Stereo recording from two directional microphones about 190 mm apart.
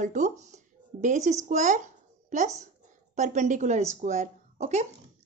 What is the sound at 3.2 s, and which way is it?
A woman's voice, 40° right (ahead or behind).